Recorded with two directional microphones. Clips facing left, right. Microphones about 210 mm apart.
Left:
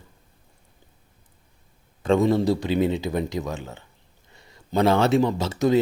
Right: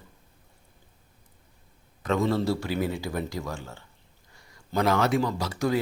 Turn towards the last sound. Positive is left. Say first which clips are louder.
# left 6 dB
turn(degrees=25)  # may be behind; listen again after turning